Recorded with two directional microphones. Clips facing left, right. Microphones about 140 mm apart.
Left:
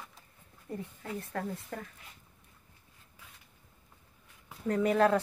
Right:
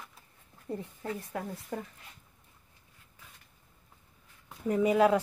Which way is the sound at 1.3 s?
10° right (ahead or behind).